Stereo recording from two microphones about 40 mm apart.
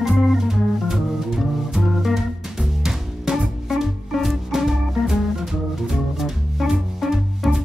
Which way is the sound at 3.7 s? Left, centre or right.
Centre.